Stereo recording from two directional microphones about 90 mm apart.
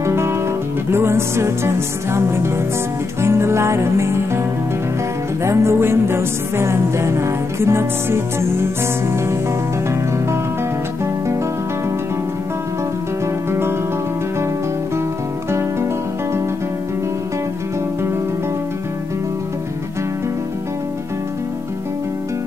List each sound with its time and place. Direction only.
0.0 s guitar: 30° right (ahead or behind)
0.8 s music: 30° right (ahead or behind)
5.4 s music: 30° right (ahead or behind)
13.5 s music: 25° right (ahead or behind)